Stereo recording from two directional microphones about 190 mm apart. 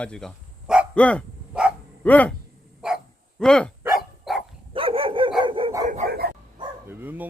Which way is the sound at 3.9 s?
Centre (ahead or behind).